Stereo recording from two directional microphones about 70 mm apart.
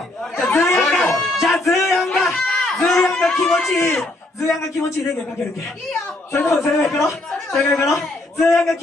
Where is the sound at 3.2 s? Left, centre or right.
Centre.